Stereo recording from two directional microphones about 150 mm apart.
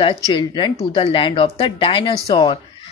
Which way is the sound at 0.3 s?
30° left (ahead or behind).